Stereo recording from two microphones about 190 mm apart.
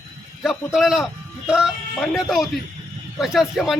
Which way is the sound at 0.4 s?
Centre (ahead or behind).